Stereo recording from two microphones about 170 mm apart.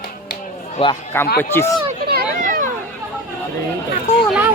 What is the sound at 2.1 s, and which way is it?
Children playing, 60° right (ahead or behind).